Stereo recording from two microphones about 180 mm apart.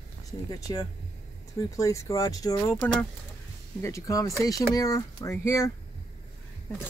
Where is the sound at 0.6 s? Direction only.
20° left (ahead or behind).